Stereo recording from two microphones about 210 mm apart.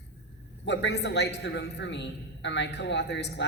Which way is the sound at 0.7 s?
55° left (ahead or behind).